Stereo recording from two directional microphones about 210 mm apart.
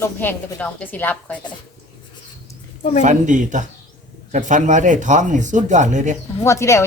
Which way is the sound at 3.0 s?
35° right (ahead or behind).